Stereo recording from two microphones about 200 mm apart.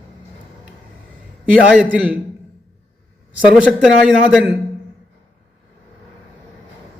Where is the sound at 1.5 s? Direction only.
5° right (ahead or behind).